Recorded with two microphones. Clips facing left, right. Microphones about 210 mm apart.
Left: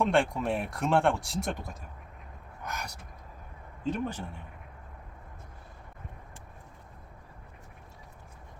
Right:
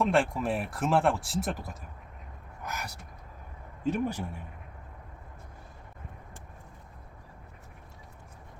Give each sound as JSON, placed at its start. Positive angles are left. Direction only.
{"t": 0.0, "sound": "speech", "side_deg": 0}